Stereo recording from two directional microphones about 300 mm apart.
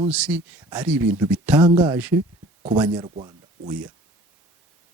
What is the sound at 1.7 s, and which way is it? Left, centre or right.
Speech, centre.